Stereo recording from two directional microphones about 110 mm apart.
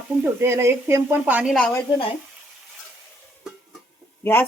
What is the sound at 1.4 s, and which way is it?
Snake, 5° left (ahead or behind).